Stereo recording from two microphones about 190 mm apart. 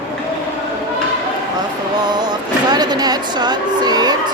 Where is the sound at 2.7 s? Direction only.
20° right (ahead or behind).